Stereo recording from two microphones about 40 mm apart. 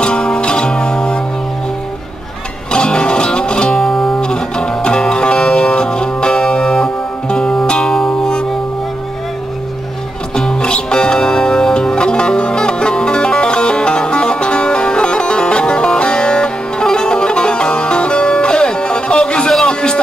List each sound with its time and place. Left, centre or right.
0.0 s music: left
2.7 s music: left
3.8 s music: centre
10.3 s music: centre
19.6 s a sound: centre